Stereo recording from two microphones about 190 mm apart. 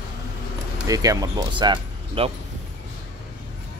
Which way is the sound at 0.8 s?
20° right (ahead or behind).